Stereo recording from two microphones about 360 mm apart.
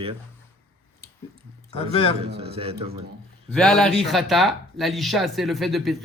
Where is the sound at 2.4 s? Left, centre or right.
Centre.